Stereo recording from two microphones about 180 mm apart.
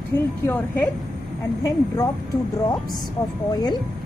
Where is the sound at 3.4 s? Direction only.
20° left (ahead or behind).